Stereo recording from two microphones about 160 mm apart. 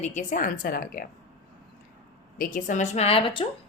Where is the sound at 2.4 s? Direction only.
55° left (ahead or behind); by 3.5 s 35° left (ahead or behind).